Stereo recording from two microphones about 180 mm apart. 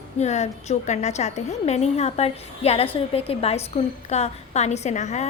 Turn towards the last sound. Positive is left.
turn(degrees=40)  # may be behind; listen again after turning